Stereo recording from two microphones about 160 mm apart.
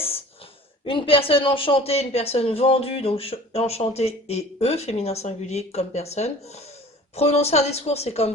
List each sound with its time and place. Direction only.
0.9 s speech: 35° left (ahead or behind)